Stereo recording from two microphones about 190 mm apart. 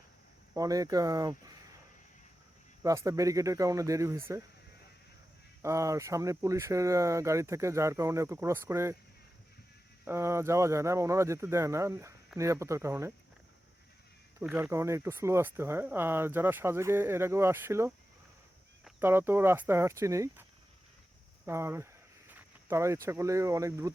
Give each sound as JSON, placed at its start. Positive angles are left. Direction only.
{"t": 0.5, "sound": "speech", "side_deg": -20}
{"t": 2.8, "sound": "speech", "side_deg": -15}
{"t": 5.6, "sound": "speech", "side_deg": -15}
{"t": 10.1, "sound": "speech", "side_deg": -15}
{"t": 14.4, "sound": "speech", "side_deg": -10}
{"t": 21.4, "sound": "speech", "side_deg": -15}